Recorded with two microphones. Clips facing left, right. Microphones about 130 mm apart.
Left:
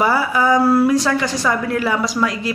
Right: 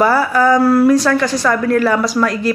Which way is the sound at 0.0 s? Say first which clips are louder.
Right 4 dB; 15° left (ahead or behind).